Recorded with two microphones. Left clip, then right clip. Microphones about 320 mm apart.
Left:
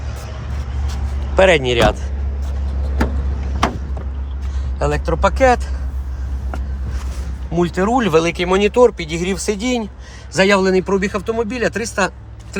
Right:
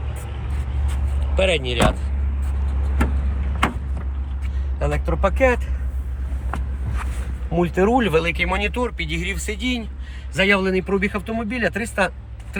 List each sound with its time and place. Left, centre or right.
1.4 s speech: left
1.7 s speech: left
4.8 s speech: centre
7.5 s speech: centre
9.0 s speech: left
10.4 s speech: centre